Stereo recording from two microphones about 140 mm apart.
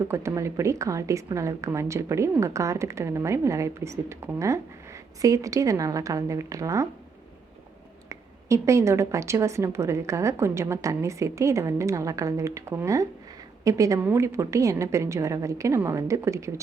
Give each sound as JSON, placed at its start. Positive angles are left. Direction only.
{"t": 0.1, "sound": "a woman's voice", "side_deg": -20}
{"t": 8.1, "sound": "a woman's voice", "side_deg": -20}